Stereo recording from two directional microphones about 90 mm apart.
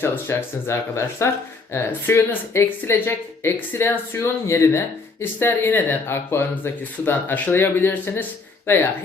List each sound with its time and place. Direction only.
0.0 s speech: 30° left (ahead or behind)